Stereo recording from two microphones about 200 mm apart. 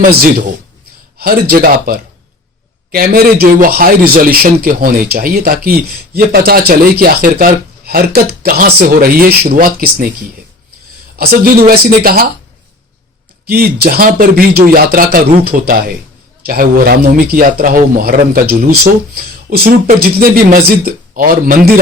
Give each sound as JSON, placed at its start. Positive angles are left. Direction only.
{"t": 0.1, "sound": "a man's voice", "side_deg": -45}
{"t": 11.2, "sound": "a man's voice", "side_deg": -50}
{"t": 13.5, "sound": "a man's voice", "side_deg": -50}